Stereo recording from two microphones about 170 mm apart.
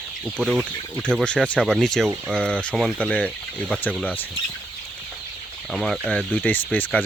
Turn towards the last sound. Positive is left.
turn(degrees=10)  # may be behind; listen again after turning